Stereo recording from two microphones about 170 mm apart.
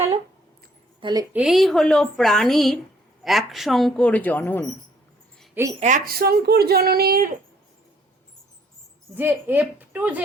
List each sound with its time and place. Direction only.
1.0 s a woman's voice: 20° right (ahead or behind)
1.3 s speech: 5° right (ahead or behind); by 4.6 s 10° left (ahead or behind)
5.8 s speech: 55° right (ahead or behind)
9.1 s a woman's voice: 10° right (ahead or behind)